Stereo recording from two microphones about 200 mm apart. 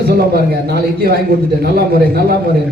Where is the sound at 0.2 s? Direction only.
50° right (ahead or behind).